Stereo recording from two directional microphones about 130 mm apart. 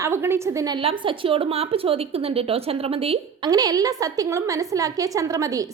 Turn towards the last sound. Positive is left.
turn(degrees=-25)  # may be behind; listen again after turning